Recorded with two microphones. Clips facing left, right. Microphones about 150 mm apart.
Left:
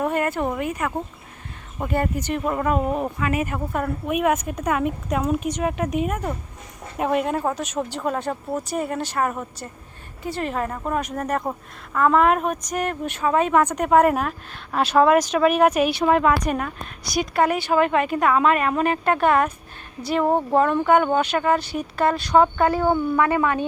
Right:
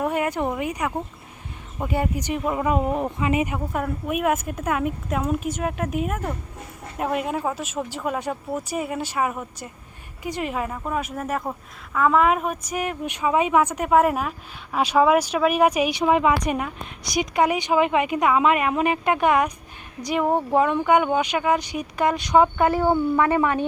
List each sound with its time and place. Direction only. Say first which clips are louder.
0.0 s a woman's voice: left 1 dB; 10° right (ahead or behind)
3.5 s a woman's voice: left 1 dB; 5° right (ahead or behind); by 23.6 s 20° right (ahead or behind)